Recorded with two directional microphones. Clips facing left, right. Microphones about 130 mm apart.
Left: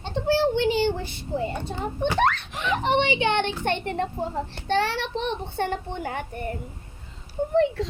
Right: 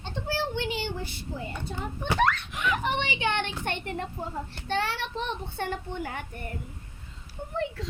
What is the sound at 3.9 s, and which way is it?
Speech, 70° left (ahead or behind).